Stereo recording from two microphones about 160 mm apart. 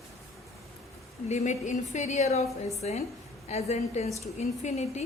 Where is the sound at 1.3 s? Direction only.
45° left (ahead or behind).